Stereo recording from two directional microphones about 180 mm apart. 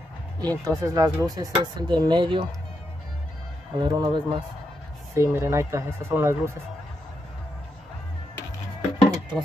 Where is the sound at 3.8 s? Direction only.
25° right (ahead or behind).